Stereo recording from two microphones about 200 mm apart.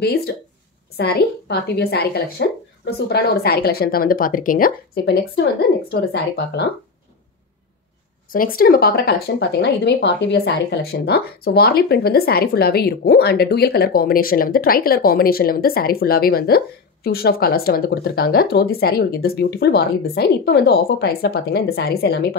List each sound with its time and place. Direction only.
0.9 s speech: 55° left (ahead or behind)
8.3 s speech: 45° left (ahead or behind)